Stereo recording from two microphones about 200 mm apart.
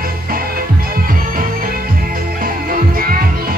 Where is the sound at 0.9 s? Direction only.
45° right (ahead or behind).